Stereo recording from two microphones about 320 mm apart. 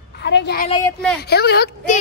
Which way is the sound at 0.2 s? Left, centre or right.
Left.